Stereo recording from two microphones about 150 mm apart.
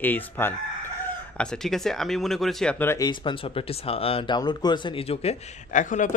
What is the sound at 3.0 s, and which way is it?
Speech, 30° left (ahead or behind).